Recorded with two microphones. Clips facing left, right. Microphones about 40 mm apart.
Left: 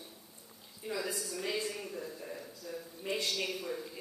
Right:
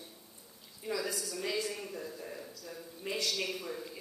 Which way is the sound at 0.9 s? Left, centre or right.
Left.